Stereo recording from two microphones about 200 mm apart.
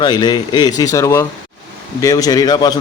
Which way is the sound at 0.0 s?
20° left (ahead or behind).